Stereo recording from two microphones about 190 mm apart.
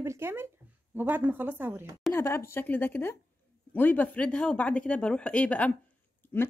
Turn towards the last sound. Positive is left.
turn(degrees=10)  # may be behind; listen again after turning